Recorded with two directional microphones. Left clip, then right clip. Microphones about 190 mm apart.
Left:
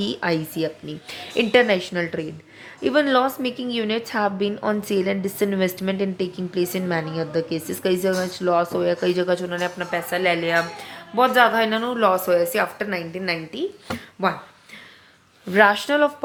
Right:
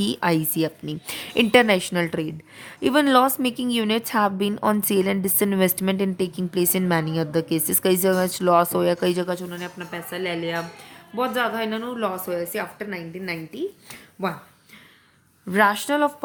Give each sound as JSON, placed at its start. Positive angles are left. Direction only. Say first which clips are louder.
{"t": 0.0, "sound": "a woman's voice", "louder": "right 1 dB", "side_deg": -35}
{"t": 15.5, "sound": "a woman's voice", "louder": "left 3 dB", "side_deg": -30}